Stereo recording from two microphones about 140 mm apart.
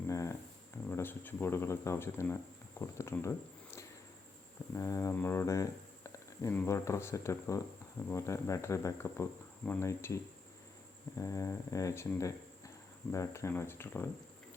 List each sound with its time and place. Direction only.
0.1 s a sound: 20° left (ahead or behind)
0.9 s speech: 15° left (ahead or behind)
11.2 s speech: 25° left (ahead or behind)